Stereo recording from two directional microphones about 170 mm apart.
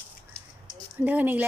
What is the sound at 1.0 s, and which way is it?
Speech, 10° right (ahead or behind).